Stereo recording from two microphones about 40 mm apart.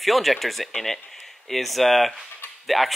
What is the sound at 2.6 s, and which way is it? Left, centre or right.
Cutlery, centre.